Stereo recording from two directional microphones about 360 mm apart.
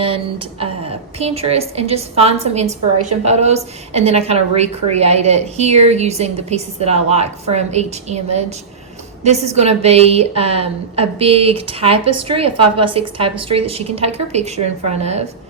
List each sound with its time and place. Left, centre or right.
0.0 s a woman's voice: centre